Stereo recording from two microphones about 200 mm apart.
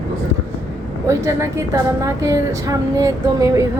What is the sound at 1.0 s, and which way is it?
A woman's voice, 15° right (ahead or behind).